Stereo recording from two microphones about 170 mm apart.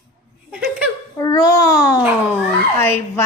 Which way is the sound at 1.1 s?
20° left (ahead or behind).